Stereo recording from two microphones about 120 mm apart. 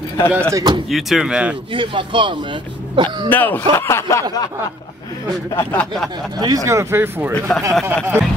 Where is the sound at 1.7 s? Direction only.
45° right (ahead or behind).